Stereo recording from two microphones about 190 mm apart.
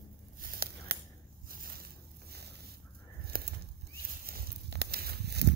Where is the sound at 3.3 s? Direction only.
50° right (ahead or behind).